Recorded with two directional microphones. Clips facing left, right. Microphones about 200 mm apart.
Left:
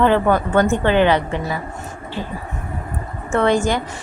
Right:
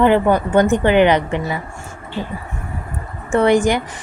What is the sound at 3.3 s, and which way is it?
Speech, 15° right (ahead or behind).